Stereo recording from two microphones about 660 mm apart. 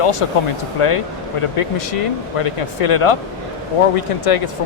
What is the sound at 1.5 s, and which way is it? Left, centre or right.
Speech, left.